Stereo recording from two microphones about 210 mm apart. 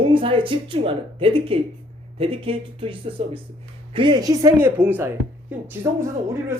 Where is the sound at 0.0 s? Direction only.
25° right (ahead or behind).